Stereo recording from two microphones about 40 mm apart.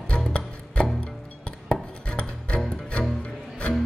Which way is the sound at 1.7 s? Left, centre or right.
Left.